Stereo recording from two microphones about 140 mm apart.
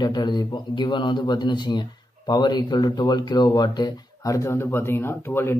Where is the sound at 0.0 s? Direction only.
30° left (ahead or behind).